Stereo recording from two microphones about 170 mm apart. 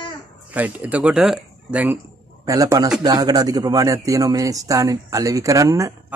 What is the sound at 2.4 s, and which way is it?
A man's voice, 20° right (ahead or behind).